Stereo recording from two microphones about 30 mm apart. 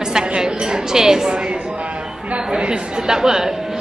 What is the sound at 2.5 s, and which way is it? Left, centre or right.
A woman's voice, right.